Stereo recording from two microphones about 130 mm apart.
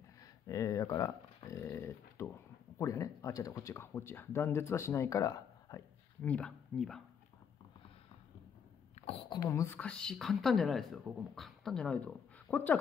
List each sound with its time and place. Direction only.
0.2 s a sound: 25° left (ahead or behind)
2.8 s speech: 25° left (ahead or behind)
6.2 s speech: 10° left (ahead or behind)
9.3 s speech: 25° left (ahead or behind)
9.8 s speech: 5° left (ahead or behind)